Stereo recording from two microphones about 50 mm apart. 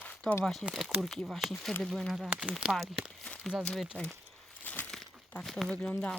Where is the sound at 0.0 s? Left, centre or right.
Left.